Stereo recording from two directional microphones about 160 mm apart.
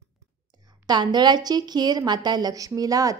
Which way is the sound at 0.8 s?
25° right (ahead or behind).